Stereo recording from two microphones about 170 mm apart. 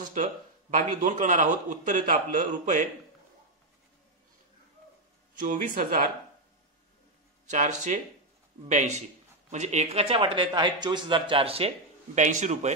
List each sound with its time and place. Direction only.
0.0 s a man's voice: 50° right (ahead or behind)
5.4 s speech: 55° right (ahead or behind)
7.4 s a man's voice: 45° right (ahead or behind)
12.2 s a man's voice: 45° right (ahead or behind)